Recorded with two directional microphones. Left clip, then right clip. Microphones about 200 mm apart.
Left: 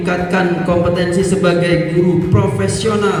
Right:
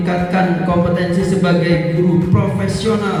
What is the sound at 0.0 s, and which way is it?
Music, 50° left (ahead or behind).